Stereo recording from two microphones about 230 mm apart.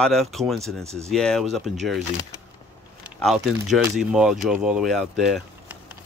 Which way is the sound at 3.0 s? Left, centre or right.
Centre.